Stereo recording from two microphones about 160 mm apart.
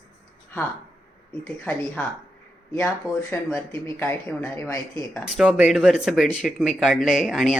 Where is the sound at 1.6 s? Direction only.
10° left (ahead or behind).